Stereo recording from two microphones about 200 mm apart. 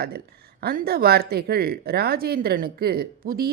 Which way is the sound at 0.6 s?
50° right (ahead or behind).